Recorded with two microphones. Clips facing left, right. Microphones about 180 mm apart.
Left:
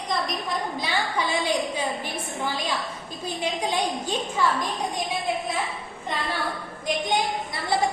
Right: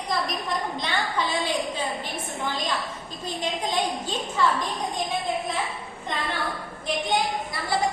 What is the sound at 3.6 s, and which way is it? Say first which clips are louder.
Speech: even; 10° left (ahead or behind).